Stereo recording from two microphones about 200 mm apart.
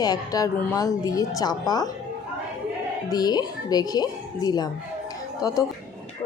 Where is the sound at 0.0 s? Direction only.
20° left (ahead or behind).